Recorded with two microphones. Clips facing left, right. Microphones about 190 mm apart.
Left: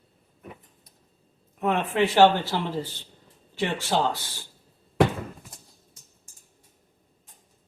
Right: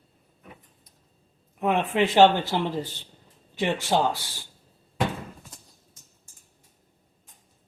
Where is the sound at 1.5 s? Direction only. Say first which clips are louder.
Right 1 dB; 15° right (ahead or behind).